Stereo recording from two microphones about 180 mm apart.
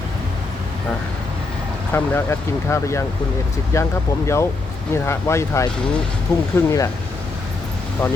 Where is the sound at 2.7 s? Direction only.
15° left (ahead or behind).